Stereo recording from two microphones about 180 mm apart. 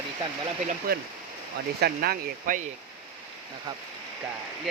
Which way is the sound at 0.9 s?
55° right (ahead or behind).